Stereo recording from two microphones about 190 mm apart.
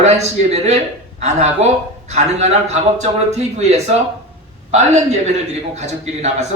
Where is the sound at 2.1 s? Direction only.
35° right (ahead or behind).